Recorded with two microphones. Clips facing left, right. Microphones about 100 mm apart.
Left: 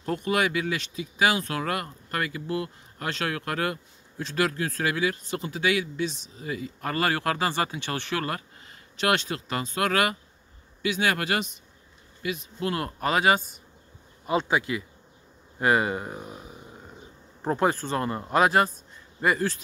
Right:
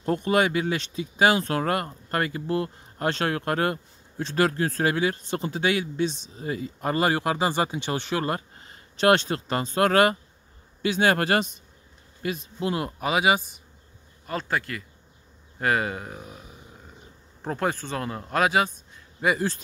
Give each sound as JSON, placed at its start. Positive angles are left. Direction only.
{"t": 0.0, "sound": "speech", "side_deg": -30}
{"t": 6.8, "sound": "speech", "side_deg": -20}
{"t": 8.5, "sound": "speech", "side_deg": -35}
{"t": 12.5, "sound": "speech", "side_deg": -20}
{"t": 14.2, "sound": "a man's voice", "side_deg": 15}